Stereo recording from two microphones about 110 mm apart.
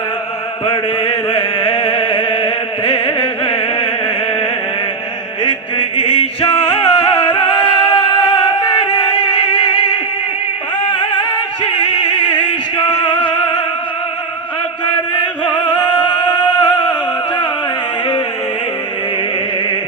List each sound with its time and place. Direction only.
0.6 s chant: 55° left (ahead or behind)
5.4 s music: 50° left (ahead or behind)
8.3 s a sound: 55° left (ahead or behind)
8.8 s music: 55° left (ahead or behind)
10.9 s music: 50° left (ahead or behind)
15.5 s music: 45° left (ahead or behind)
16.2 s music: 20° left (ahead or behind)